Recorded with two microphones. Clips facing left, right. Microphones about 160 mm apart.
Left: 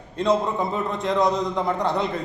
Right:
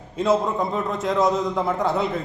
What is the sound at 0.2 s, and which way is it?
A man's voice, centre (ahead or behind).